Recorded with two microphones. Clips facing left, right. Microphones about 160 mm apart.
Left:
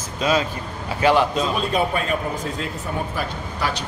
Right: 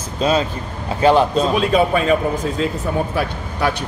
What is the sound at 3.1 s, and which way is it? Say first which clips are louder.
Speech: right 5 dB; 60° right (ahead or behind).